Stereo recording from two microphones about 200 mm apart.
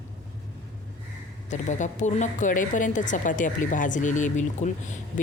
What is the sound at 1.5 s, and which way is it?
A woman's voice, 35° left (ahead or behind).